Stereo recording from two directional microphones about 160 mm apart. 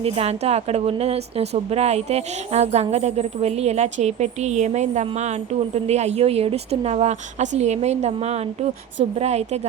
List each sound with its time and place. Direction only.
0.0 s a woman's voice: 40° right (ahead or behind)